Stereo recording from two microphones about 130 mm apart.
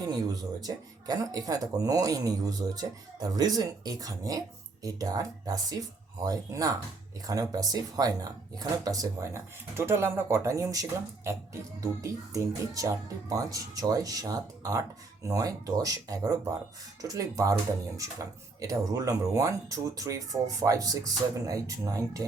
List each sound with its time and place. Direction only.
0.6 s speech: 30° right (ahead or behind)